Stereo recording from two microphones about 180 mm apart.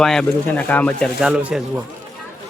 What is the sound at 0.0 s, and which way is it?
Speech, 5° left (ahead or behind).